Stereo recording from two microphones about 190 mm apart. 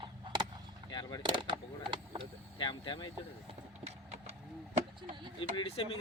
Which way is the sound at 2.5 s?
25° left (ahead or behind).